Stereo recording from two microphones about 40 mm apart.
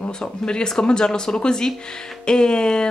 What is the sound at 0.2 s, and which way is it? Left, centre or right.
Speech, centre.